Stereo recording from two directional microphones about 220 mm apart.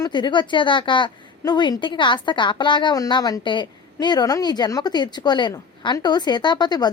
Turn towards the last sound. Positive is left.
turn(degrees=20)  # may be behind; listen again after turning